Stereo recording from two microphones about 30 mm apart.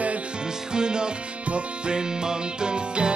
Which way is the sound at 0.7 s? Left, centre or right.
Right.